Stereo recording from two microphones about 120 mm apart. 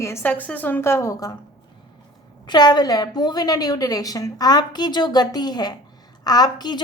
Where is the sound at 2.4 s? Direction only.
35° left (ahead or behind).